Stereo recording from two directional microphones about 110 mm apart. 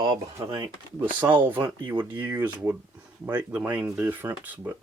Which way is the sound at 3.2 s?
10° right (ahead or behind).